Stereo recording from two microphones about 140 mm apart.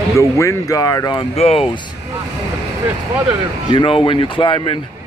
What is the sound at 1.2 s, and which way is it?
Speech, 45° left (ahead or behind).